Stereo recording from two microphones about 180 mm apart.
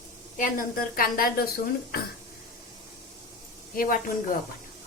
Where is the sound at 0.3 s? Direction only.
50° left (ahead or behind).